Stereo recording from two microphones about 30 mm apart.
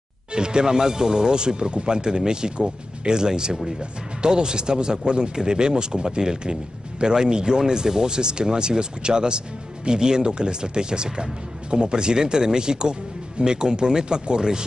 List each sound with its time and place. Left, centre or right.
0.3 s speech: right